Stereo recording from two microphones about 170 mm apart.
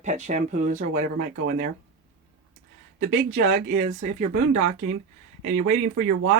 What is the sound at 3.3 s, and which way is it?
Speech, 45° right (ahead or behind).